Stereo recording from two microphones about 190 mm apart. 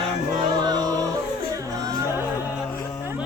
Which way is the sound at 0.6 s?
20° right (ahead or behind).